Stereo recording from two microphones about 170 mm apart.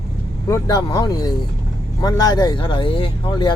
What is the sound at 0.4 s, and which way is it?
Speech, 20° left (ahead or behind).